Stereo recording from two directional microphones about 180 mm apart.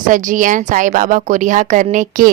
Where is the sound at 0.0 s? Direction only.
45° right (ahead or behind).